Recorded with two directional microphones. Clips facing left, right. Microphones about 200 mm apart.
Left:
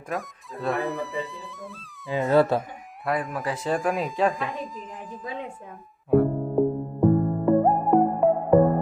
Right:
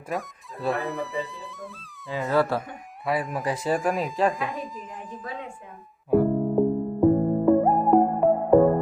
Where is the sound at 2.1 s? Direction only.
25° left (ahead or behind).